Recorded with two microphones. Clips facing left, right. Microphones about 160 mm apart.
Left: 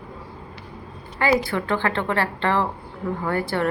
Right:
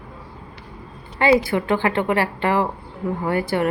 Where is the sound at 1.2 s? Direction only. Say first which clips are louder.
Right 4 dB; 20° right (ahead or behind).